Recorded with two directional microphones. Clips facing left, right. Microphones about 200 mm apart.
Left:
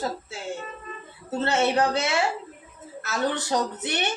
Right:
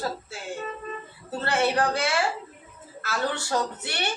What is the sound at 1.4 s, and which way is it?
A woman's voice, 25° left (ahead or behind).